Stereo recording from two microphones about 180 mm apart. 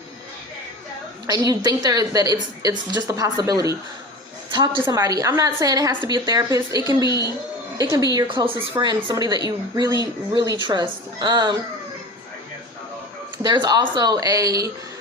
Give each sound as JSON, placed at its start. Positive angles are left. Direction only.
{"t": 1.3, "sound": "a woman's voice", "side_deg": -20}
{"t": 7.0, "sound": "a woman's voice", "side_deg": 25}
{"t": 7.8, "sound": "a woman's voice", "side_deg": -20}
{"t": 13.4, "sound": "a woman's voice", "side_deg": -25}